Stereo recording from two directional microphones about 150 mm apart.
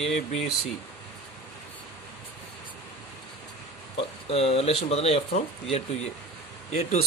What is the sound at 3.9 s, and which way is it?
Speech, 40° left (ahead or behind).